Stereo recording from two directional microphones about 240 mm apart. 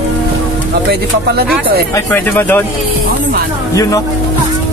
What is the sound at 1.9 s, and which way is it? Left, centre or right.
Speech, centre.